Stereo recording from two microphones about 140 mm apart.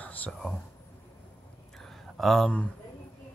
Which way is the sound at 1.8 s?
Centre (ahead or behind).